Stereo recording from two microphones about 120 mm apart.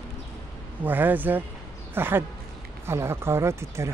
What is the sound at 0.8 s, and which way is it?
Speech, 15° right (ahead or behind).